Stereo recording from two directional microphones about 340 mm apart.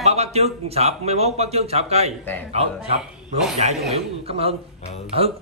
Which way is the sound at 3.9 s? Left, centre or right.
Centre.